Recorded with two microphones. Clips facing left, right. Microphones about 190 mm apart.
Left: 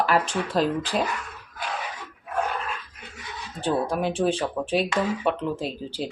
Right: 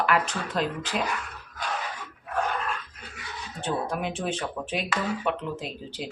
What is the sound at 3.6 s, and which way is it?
Speech, 35° left (ahead or behind).